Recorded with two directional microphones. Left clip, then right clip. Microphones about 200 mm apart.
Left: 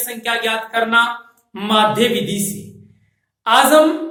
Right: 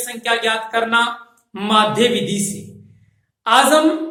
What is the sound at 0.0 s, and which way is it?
A woman's voice, 5° right (ahead or behind).